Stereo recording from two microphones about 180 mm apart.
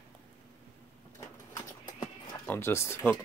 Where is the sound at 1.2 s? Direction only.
20° left (ahead or behind).